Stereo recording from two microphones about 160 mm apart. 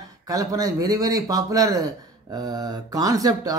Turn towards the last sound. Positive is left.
turn(degrees=-25)  # may be behind; listen again after turning